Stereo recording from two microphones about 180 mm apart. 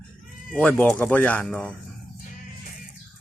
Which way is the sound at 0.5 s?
10° left (ahead or behind).